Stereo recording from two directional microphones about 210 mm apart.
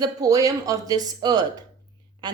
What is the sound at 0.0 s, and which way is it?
A woman's voice, 15° right (ahead or behind).